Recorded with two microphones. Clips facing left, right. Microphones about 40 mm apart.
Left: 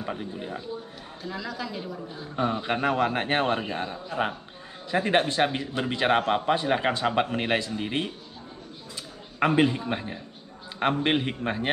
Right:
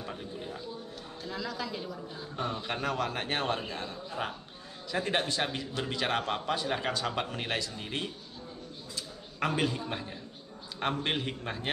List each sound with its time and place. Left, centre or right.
0.0 s speech: left
1.2 s a man's voice: centre
1.8 s a man's voice: centre
9.4 s a man's voice: left